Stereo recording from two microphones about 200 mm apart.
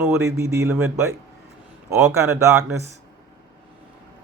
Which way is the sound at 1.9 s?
15° right (ahead or behind).